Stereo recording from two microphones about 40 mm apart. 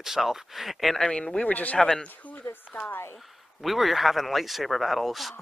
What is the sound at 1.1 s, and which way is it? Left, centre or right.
Speech, left.